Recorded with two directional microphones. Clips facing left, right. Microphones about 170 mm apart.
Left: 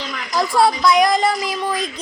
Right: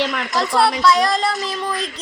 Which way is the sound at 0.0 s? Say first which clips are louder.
Right 8 dB; 80° right.